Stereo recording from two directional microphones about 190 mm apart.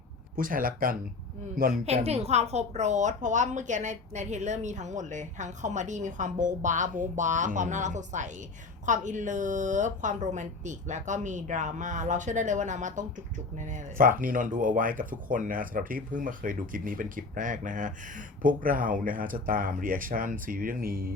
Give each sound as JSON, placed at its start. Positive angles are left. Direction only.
{"t": 0.3, "sound": "speech", "side_deg": -45}
{"t": 1.8, "sound": "a woman's voice", "side_deg": -35}